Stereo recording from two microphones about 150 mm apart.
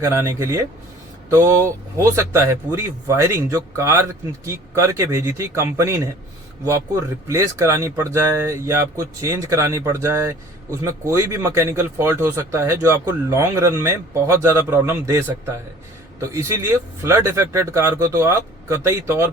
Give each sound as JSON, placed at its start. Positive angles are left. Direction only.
{"t": 0.0, "sound": "speech", "side_deg": -20}
{"t": 16.2, "sound": "speech", "side_deg": -20}